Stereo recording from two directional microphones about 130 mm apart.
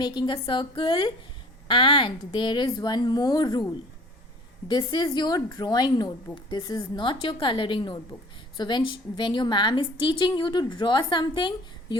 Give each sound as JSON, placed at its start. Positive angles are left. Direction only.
{"t": 0.0, "sound": "a woman's voice", "side_deg": 35}
{"t": 4.7, "sound": "a woman's voice", "side_deg": 35}
{"t": 6.9, "sound": "a woman's voice", "side_deg": 40}